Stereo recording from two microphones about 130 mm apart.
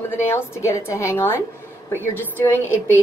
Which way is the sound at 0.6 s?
20° left (ahead or behind).